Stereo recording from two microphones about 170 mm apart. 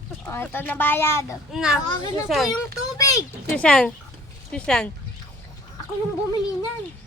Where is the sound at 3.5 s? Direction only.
5° left (ahead or behind).